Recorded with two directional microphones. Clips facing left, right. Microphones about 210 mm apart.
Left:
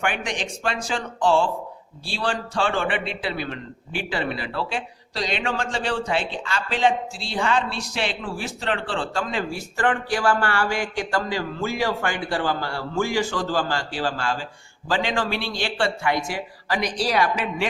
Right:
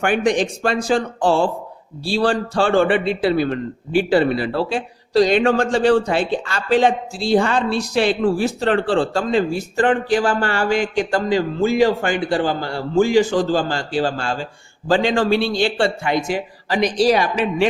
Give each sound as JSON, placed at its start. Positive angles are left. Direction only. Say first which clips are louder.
{"t": 0.0, "sound": "a man's voice", "louder": "right 10 dB", "side_deg": -40}
{"t": 9.6, "sound": "speech", "louder": "right 6 dB", "side_deg": -25}